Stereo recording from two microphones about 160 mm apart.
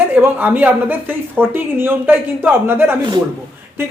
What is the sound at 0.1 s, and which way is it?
Speech, 10° right (ahead or behind).